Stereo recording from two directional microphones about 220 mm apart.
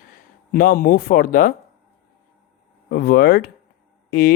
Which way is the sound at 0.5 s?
40° left (ahead or behind).